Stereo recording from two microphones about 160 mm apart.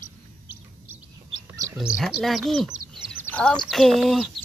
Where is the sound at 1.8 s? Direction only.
5° right (ahead or behind).